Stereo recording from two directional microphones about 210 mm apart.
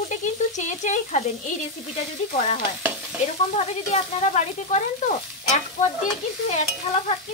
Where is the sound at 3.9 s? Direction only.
35° left (ahead or behind).